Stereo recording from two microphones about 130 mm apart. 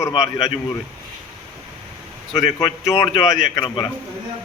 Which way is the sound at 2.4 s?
30° left (ahead or behind).